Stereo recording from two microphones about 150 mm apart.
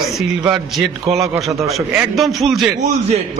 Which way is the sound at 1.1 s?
Centre (ahead or behind).